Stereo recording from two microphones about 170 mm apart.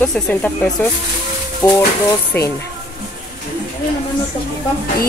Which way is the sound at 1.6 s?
20° left (ahead or behind).